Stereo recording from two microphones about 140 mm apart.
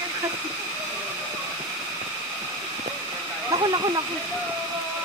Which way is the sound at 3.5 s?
30° right (ahead or behind).